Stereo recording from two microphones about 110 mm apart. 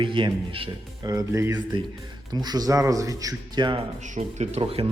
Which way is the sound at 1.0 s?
30° right (ahead or behind).